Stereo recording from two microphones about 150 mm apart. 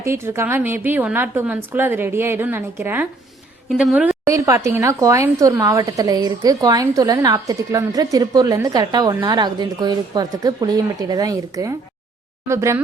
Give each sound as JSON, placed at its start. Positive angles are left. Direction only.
{"t": 0.0, "sound": "a woman's voice", "side_deg": -15}
{"t": 3.7, "sound": "a woman's voice", "side_deg": -5}
{"t": 4.3, "sound": "a woman's voice", "side_deg": -20}